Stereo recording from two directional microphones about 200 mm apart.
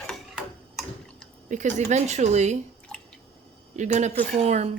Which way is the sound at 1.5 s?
35° right (ahead or behind).